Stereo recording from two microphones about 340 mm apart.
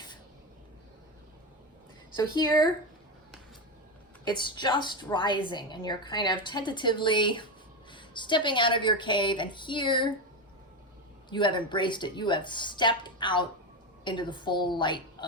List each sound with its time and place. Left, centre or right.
2.1 s a woman's voice: centre
4.3 s a woman's voice: centre
11.3 s a woman's voice: centre